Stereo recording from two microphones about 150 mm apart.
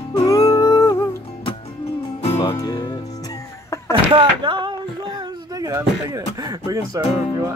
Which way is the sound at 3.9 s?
35° right (ahead or behind).